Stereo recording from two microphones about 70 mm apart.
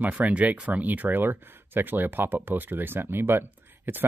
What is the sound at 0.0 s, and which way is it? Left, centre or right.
Speech, right.